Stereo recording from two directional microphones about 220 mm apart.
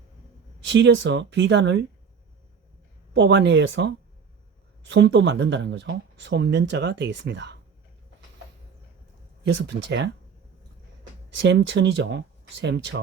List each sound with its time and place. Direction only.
0.7 s speech: 55° right (ahead or behind)
3.1 s speech: 55° right (ahead or behind)
9.4 s speech: 50° right (ahead or behind)
11.3 s speech: 55° right (ahead or behind)